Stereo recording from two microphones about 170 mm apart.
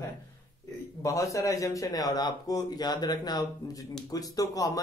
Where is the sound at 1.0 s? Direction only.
20° left (ahead or behind).